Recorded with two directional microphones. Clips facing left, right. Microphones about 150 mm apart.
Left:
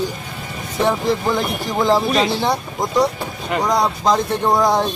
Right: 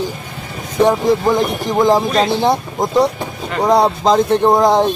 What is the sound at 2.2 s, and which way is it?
Speech, 55° right (ahead or behind).